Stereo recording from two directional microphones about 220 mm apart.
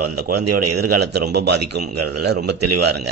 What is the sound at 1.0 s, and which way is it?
Speech, 50° right (ahead or behind).